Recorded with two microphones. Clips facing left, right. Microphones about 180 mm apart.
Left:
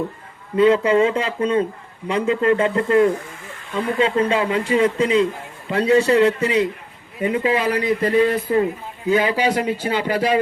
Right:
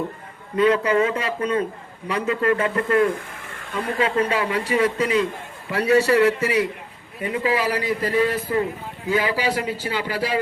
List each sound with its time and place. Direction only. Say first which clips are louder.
0.5 s speech: left 3 dB; 25° left (ahead or behind)